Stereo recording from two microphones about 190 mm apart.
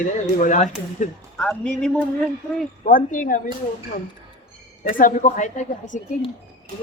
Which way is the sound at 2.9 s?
45° left (ahead or behind).